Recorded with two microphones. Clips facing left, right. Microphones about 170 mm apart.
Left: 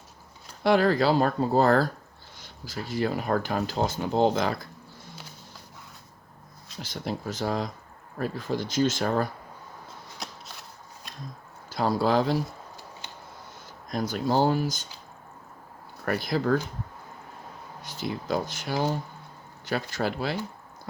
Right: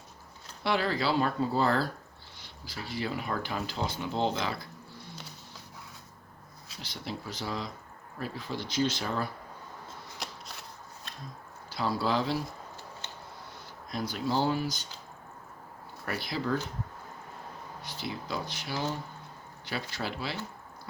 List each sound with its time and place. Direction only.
0.6 s speech: 45° left (ahead or behind)
6.8 s speech: 45° left (ahead or behind)
10.2 s shuffling cards: centre (ahead or behind)
11.7 s speech: 45° left (ahead or behind)
13.0 s a sound: 10° left (ahead or behind)
13.9 s speech: 45° left (ahead or behind)
16.0 s speech: 45° left (ahead or behind)
17.8 s speech: 45° left (ahead or behind)